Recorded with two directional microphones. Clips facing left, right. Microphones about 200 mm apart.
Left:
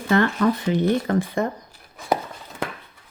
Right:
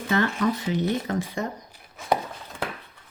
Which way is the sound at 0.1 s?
55° left (ahead or behind).